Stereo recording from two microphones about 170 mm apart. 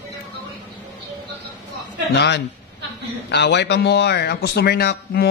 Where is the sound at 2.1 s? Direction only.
90° left.